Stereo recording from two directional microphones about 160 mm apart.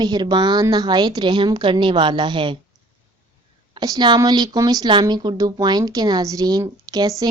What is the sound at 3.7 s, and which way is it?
Speech, 25° right (ahead or behind).